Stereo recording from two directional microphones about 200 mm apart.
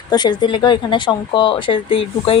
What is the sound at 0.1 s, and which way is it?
Speech, 20° left (ahead or behind).